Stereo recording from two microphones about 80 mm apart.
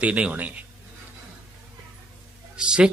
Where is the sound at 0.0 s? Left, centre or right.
Centre.